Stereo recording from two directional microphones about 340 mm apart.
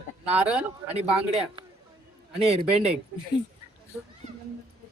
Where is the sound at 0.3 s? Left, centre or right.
Centre.